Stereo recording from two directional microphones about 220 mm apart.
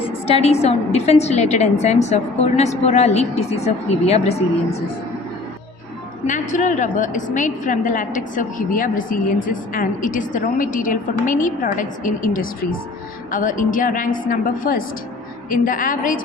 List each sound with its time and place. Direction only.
0.1 s a woman's voice: 25° left (ahead or behind)
6.2 s a woman's voice: 35° left (ahead or behind)